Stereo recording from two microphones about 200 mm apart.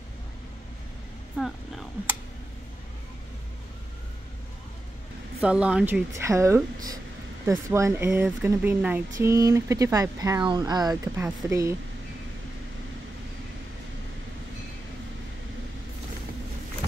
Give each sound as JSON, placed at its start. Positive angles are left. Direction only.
{"t": 1.3, "sound": "speech", "side_deg": 0}
{"t": 5.4, "sound": "speech", "side_deg": -5}
{"t": 6.1, "sound": "speech", "side_deg": -15}